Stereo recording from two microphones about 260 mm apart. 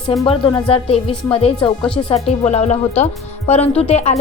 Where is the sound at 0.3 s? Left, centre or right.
Centre.